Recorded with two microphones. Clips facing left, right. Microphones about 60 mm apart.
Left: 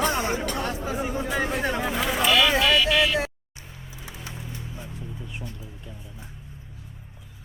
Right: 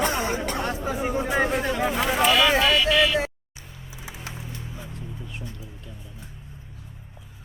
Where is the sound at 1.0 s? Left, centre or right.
Right.